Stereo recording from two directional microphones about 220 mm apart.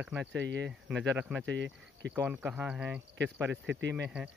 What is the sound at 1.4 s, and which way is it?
Speech, 55° right (ahead or behind).